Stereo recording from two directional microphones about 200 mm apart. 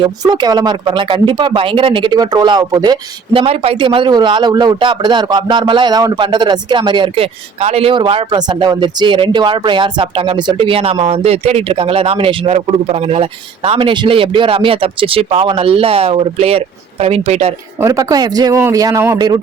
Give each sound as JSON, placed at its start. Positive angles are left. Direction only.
{"t": 0.0, "sound": "speech", "side_deg": -20}
{"t": 17.7, "sound": "speech", "side_deg": -15}